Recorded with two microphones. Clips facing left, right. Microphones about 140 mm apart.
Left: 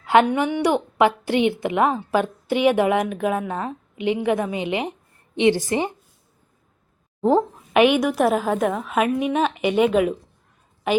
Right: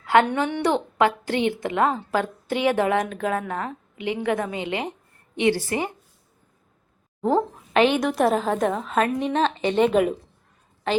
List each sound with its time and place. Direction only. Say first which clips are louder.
0.0 s a woman's voice: left 2 dB; 15° left (ahead or behind)
7.2 s a woman's voice: left 3 dB; 15° left (ahead or behind); by 10.2 s centre (ahead or behind)
10.9 s a woman's voice: left 3 dB; 15° left (ahead or behind)